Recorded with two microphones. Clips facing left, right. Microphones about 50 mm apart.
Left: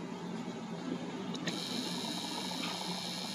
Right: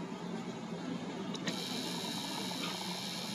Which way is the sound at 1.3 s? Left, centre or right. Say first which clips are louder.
Left 1 dB; right.